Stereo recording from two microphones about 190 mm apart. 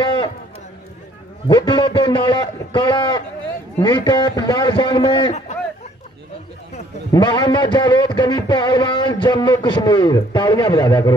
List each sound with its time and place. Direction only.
1.5 s speech: 25° left (ahead or behind)
7.1 s speech: 20° left (ahead or behind)